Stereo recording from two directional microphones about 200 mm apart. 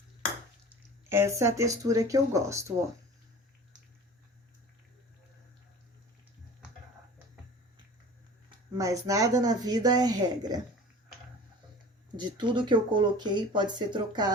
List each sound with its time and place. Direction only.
1.1 s speech: 15° right (ahead or behind)
8.4 s speech: 15° right (ahead or behind)
12.1 s speech: 20° right (ahead or behind)